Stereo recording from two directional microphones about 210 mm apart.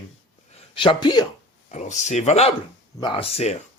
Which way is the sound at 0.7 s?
25° left (ahead or behind).